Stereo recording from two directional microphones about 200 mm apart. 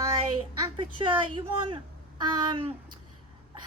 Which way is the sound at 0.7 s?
25° right (ahead or behind).